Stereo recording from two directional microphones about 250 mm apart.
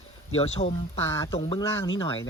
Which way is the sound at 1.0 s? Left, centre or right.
Centre.